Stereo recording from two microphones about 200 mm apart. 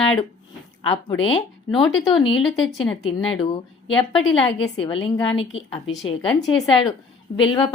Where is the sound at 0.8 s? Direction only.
25° left (ahead or behind).